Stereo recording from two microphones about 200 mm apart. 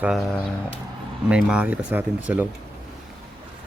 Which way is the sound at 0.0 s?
5° right (ahead or behind).